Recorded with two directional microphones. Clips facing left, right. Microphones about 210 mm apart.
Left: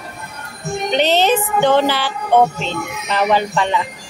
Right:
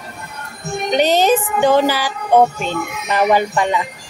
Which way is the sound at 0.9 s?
10° right (ahead or behind).